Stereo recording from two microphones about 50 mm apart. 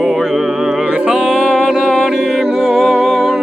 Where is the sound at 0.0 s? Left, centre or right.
Centre.